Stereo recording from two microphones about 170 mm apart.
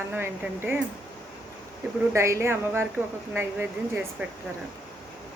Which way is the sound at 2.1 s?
15° right (ahead or behind).